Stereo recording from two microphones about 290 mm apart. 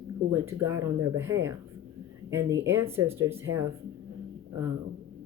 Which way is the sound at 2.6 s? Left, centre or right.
Centre.